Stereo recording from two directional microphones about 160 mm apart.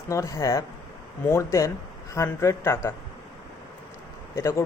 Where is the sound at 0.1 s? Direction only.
20° left (ahead or behind).